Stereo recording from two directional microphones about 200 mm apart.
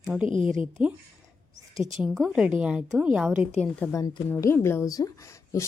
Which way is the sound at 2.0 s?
Centre (ahead or behind).